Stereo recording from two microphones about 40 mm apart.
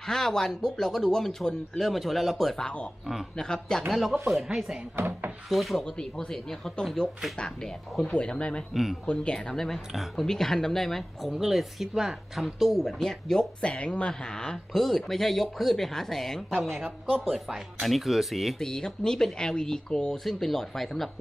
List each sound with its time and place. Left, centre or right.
0.0 s speech: centre
1.9 s speech: centre
3.3 s speech: centre
4.5 s speech: centre
4.9 s speech: right
5.5 s speech: centre
5.9 s speech: centre
10.2 s speech: centre
11.3 s speech: centre
13.7 s speech: left; by 18.6 s centre
18.6 s speech: centre
20.2 s speech: centre